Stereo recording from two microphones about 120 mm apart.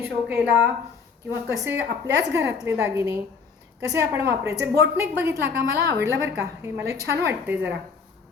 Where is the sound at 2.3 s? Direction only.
25° right (ahead or behind).